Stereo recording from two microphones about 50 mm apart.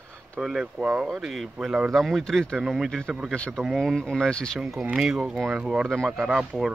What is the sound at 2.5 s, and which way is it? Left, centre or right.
Speech, centre.